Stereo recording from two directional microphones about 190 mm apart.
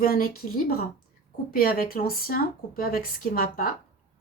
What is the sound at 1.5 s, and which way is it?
A woman's voice, 50° left (ahead or behind).